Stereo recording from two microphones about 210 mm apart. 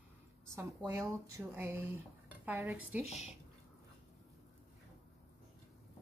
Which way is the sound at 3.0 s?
30° left (ahead or behind).